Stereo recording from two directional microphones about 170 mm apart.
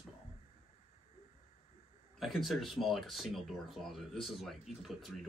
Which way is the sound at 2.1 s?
Centre (ahead or behind).